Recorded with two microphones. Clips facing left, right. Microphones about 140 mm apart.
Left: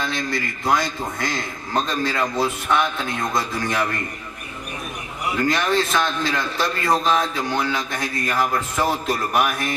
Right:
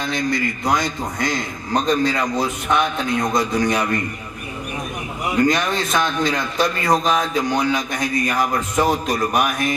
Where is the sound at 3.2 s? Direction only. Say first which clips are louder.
Right 6 dB; 20° right (ahead or behind).